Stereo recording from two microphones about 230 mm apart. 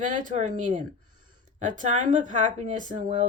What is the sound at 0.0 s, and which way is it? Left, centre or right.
Speech, right.